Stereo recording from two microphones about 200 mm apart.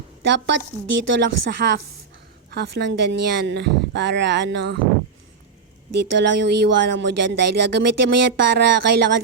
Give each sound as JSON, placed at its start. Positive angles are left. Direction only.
{"t": 0.3, "sound": "speech", "side_deg": -60}
{"t": 6.0, "sound": "speech", "side_deg": -60}